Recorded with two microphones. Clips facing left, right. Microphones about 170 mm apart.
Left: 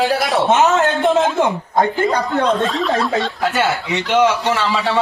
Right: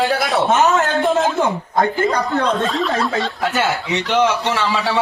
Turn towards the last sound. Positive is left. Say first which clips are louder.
# left 2 dB
turn(degrees=10)  # may be behind; listen again after turning